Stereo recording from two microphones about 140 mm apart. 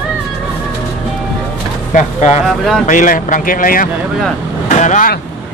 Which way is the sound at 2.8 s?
70° left (ahead or behind).